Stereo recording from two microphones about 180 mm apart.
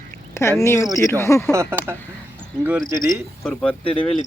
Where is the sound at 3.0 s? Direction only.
Centre (ahead or behind).